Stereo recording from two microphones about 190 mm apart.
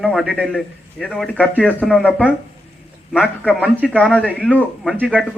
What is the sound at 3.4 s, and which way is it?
A man's voice, 10° left (ahead or behind).